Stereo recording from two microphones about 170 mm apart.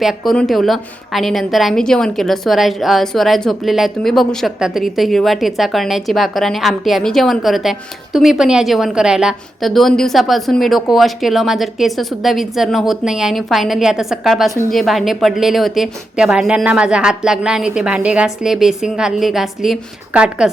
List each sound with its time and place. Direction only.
0.0 s a woman's voice: centre (ahead or behind)